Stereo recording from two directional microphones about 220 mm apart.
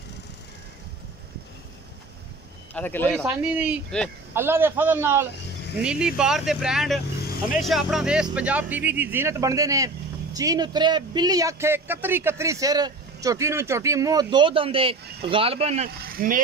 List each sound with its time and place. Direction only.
2.7 s speech: 10° left (ahead or behind)
3.3 s a man's voice: 10° right (ahead or behind); by 15.9 s 30° right (ahead or behind)
16.0 s speech: 40° right (ahead or behind)